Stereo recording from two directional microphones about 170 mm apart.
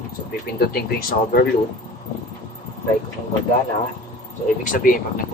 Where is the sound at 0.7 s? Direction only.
60° left (ahead or behind).